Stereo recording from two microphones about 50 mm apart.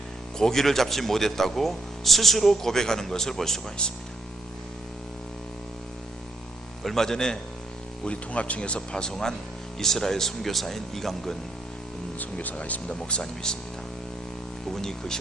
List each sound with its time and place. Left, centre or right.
0.3 s speech: centre
3.8 s speech: centre
6.8 s speech: centre
8.0 s speech: left; by 11.3 s centre
12.2 s speech: left
13.1 s speech: centre
14.7 s speech: centre